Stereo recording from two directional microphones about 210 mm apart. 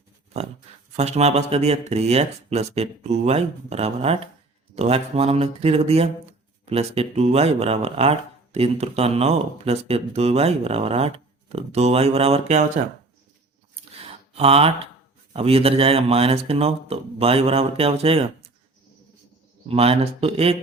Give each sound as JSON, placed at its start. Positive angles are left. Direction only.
{"t": 0.9, "sound": "speech", "side_deg": -30}
{"t": 14.3, "sound": "speech", "side_deg": -30}
{"t": 19.6, "sound": "speech", "side_deg": -30}